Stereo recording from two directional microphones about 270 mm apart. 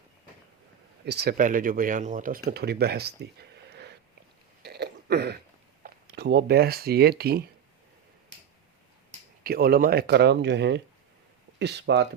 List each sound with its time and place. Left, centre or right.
1.0 s speech: right
4.6 s throat clearing: right
5.8 s speech: right
9.4 s speech: right